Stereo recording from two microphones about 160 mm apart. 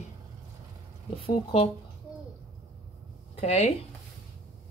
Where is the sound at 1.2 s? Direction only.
35° left (ahead or behind).